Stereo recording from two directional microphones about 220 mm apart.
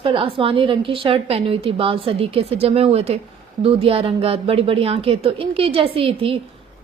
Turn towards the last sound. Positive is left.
turn(degrees=-25)  # may be behind; listen again after turning